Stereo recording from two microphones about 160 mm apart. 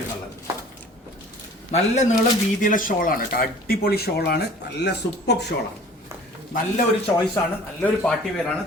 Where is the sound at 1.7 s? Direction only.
45° left (ahead or behind); by 5.5 s 90° left.